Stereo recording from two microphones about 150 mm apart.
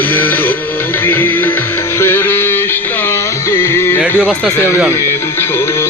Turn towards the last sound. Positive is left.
turn(degrees=15)  # may be behind; listen again after turning